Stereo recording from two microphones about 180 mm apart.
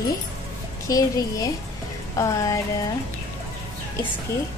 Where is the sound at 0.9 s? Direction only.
20° left (ahead or behind).